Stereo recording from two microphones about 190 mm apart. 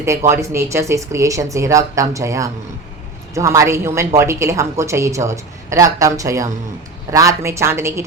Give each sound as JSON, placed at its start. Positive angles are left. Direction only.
{"t": 0.0, "sound": "speech", "side_deg": -15}